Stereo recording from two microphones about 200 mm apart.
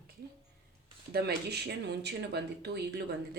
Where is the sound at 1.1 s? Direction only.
55° right (ahead or behind).